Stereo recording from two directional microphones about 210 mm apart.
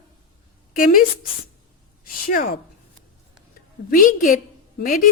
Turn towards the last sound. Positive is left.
turn(degrees=40)  # may be behind; listen again after turning